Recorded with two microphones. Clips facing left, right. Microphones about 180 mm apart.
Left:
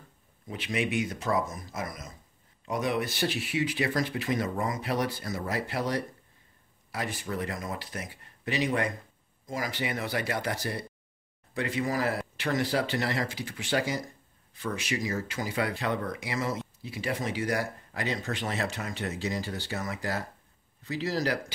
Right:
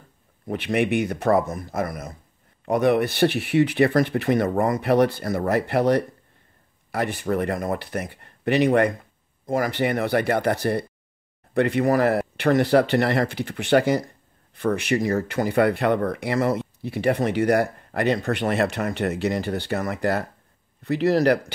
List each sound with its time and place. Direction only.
0.5 s speech: 60° right (ahead or behind)